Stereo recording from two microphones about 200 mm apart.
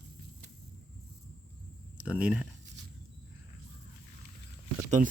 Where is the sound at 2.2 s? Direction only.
5° right (ahead or behind).